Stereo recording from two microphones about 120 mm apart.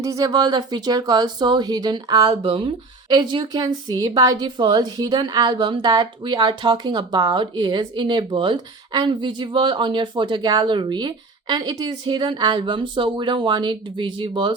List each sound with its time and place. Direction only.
0.0 s speech: 30° right (ahead or behind)
2.3 s speech: 50° right (ahead or behind)